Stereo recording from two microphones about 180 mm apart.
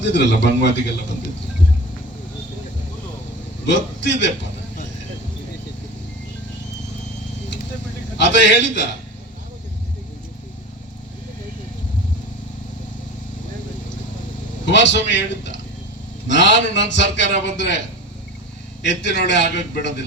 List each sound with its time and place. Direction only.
0.0 s a man's voice: 75° left (ahead or behind)
3.7 s speech: 80° left
8.2 s speech: 80° left
14.7 s a man's voice: 80° left
18.8 s a man's voice: 75° left (ahead or behind)